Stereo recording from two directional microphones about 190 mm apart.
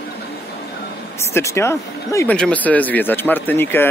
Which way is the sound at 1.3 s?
15° left (ahead or behind).